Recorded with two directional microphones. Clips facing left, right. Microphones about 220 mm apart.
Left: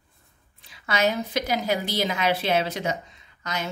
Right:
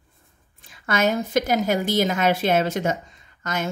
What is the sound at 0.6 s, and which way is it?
A woman's voice, 50° right (ahead or behind).